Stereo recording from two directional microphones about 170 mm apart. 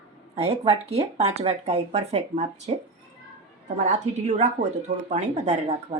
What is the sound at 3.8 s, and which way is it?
Speech, 40° right (ahead or behind).